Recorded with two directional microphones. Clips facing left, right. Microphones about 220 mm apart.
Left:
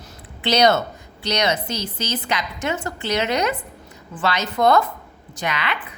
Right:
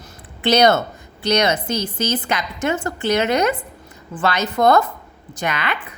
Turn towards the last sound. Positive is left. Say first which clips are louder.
# right 2 dB
turn(degrees=-50)  # may be behind; listen again after turning